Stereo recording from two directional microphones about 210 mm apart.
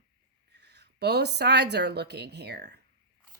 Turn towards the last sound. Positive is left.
turn(degrees=-50)  # may be behind; listen again after turning